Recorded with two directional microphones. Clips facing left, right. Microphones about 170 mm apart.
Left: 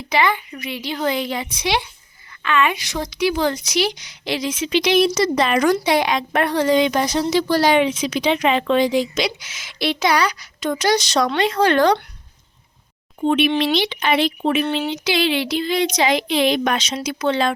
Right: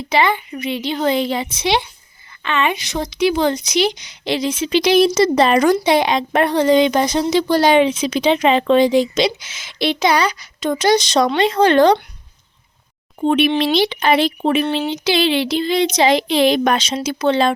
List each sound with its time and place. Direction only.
0.1 s speech: 25° right (ahead or behind)
13.1 s speech: 35° right (ahead or behind)